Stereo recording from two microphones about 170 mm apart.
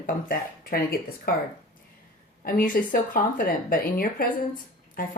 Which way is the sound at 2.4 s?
55° left (ahead or behind).